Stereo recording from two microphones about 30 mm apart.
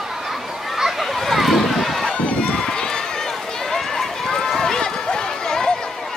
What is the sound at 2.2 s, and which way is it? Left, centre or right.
Run, left.